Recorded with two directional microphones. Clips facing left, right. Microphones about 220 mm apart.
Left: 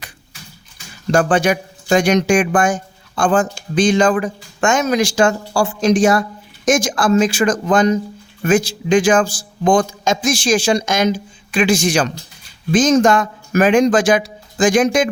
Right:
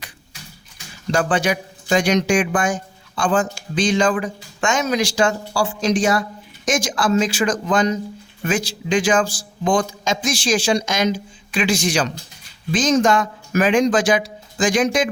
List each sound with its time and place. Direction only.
1.1 s speech: 50° left (ahead or behind)